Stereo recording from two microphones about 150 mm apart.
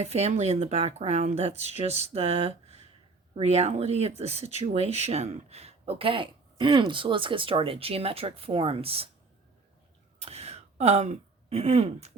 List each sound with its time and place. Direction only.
0.0 s speech: 45° right (ahead or behind)
10.2 s speech: 45° right (ahead or behind)